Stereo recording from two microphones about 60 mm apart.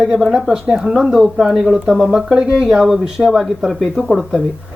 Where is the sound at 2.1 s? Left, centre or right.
Centre.